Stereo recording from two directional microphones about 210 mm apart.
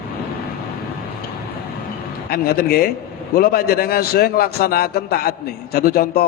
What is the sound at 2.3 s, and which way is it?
A man's voice, 45° left (ahead or behind).